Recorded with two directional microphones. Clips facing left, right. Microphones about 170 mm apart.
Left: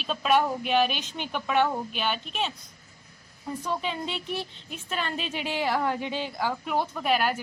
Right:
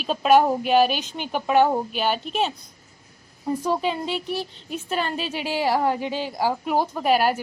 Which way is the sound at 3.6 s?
40° right (ahead or behind).